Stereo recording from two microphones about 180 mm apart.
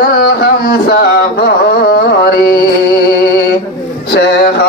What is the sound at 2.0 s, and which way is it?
Music, 60° left (ahead or behind).